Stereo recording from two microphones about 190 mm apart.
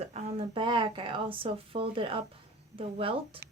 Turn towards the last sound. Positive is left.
turn(degrees=-30)  # may be behind; listen again after turning